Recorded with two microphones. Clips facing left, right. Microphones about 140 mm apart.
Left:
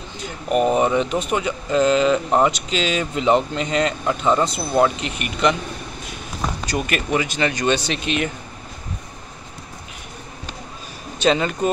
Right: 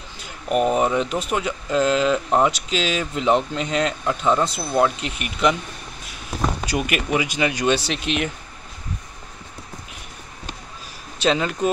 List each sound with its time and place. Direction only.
0.2 s speech: centre (ahead or behind)
6.6 s speech: 10° right (ahead or behind)
11.1 s speech: centre (ahead or behind)